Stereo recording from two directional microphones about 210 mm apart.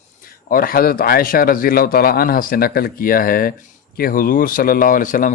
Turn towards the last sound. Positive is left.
turn(degrees=40)  # may be behind; listen again after turning